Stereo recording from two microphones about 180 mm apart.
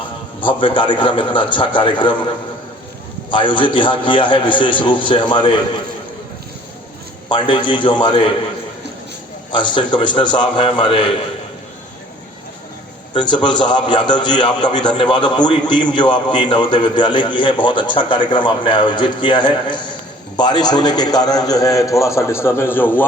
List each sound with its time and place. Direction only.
0.4 s a man's voice: 25° left (ahead or behind)
3.2 s a man's voice: 25° left (ahead or behind)
7.3 s a man's voice: 25° left (ahead or behind)
9.5 s a man's voice: 25° left (ahead or behind)
13.1 s a man's voice: 25° left (ahead or behind)